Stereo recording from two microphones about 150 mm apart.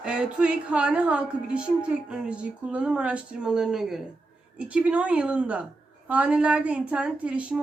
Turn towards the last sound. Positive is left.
turn(degrees=-5)  # may be behind; listen again after turning